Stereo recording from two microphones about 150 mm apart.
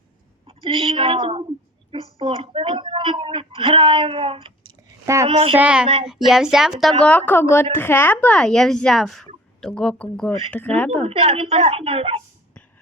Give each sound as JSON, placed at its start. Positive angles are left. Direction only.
{"t": 0.4, "sound": "a woman's voice", "side_deg": -35}
{"t": 5.0, "sound": "a child's voice", "side_deg": -20}
{"t": 5.3, "sound": "a woman's voice", "side_deg": -40}
{"t": 5.5, "sound": "speech", "side_deg": -5}
{"t": 11.0, "sound": "a woman's voice", "side_deg": -40}